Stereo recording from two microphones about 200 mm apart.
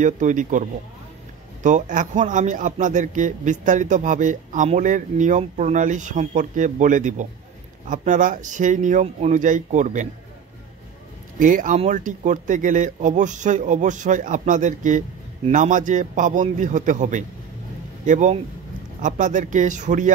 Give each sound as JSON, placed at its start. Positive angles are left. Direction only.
{"t": 0.0, "sound": "speech", "side_deg": -40}
{"t": 11.3, "sound": "speech", "side_deg": -40}